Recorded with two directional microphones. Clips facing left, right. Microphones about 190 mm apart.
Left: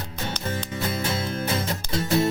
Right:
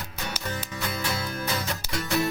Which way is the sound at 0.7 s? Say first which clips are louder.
Left 4 dB; 25° left (ahead or behind).